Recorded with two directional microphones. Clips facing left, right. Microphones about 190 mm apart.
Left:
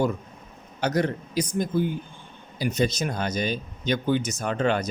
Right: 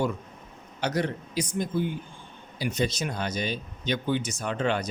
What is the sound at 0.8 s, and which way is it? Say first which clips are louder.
Speech: left 3 dB; 45° left (ahead or behind).